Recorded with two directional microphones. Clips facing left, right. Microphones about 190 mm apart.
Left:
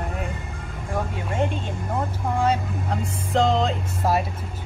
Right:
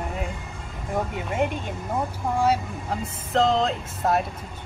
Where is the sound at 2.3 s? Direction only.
5° right (ahead or behind).